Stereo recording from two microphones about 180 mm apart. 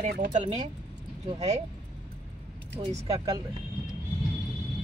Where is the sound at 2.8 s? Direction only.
35° right (ahead or behind).